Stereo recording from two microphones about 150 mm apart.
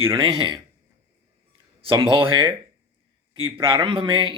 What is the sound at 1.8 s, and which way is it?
Speech, 35° right (ahead or behind).